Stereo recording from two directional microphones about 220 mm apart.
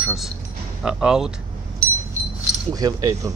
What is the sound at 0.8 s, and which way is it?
Speech, 5° right (ahead or behind).